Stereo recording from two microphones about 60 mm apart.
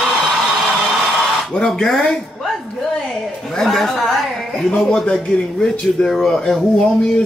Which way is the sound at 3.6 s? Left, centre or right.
Centre.